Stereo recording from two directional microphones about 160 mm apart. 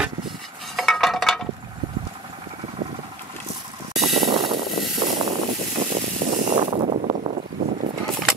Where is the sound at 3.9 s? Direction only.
Centre (ahead or behind).